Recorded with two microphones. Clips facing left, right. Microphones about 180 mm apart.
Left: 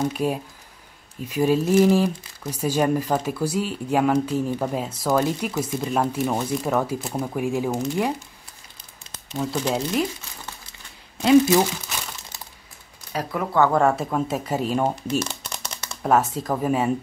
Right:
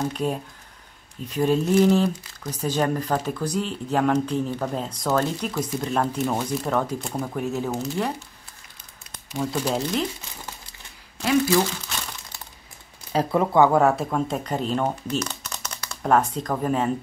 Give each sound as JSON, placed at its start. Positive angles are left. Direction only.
{"t": 0.0, "sound": "speech", "side_deg": 10}
{"t": 9.4, "sound": "speech", "side_deg": 0}
{"t": 11.1, "sound": "speech", "side_deg": 20}
{"t": 13.1, "sound": "speech", "side_deg": -25}
{"t": 13.6, "sound": "speech", "side_deg": -5}
{"t": 15.1, "sound": "crumpling", "side_deg": 30}
{"t": 16.0, "sound": "speech", "side_deg": 5}